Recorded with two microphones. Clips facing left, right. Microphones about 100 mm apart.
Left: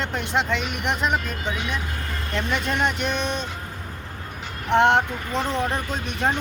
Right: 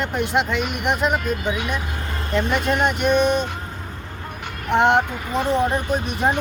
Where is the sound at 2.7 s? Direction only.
5° right (ahead or behind).